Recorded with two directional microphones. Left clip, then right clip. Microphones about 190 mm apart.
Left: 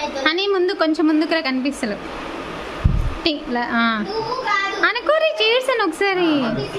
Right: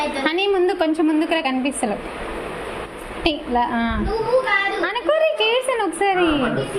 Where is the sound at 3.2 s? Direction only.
10° left (ahead or behind).